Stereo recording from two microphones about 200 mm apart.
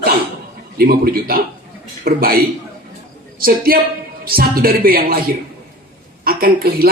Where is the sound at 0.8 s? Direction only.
50° right (ahead or behind).